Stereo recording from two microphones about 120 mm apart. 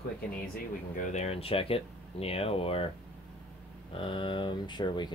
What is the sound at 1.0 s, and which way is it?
Speech, 70° left (ahead or behind).